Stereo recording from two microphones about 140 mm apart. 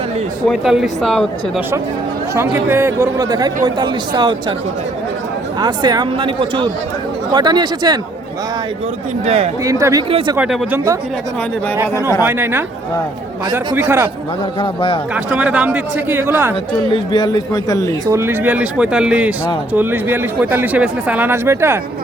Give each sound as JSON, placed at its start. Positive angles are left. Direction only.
{"t": 0.4, "sound": "speech", "side_deg": 0}
{"t": 2.3, "sound": "speech", "side_deg": -15}
{"t": 5.5, "sound": "speech", "side_deg": -30}
{"t": 9.2, "sound": "speech", "side_deg": -50}
{"t": 9.6, "sound": "speech", "side_deg": -25}
{"t": 10.1, "sound": "speech", "side_deg": -40}
{"t": 10.3, "sound": "speech", "side_deg": -10}
{"t": 12.2, "sound": "speech", "side_deg": -15}
{"t": 13.7, "sound": "speech", "side_deg": -15}
{"t": 14.6, "sound": "speech", "side_deg": 40}
{"t": 15.1, "sound": "speech", "side_deg": -10}
{"t": 16.9, "sound": "a man's voice", "side_deg": 30}
{"t": 18.0, "sound": "speech", "side_deg": -20}